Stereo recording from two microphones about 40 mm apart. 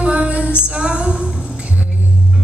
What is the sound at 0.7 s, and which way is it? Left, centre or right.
Music, right.